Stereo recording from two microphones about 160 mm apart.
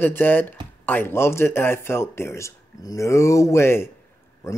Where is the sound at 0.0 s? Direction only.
10° left (ahead or behind).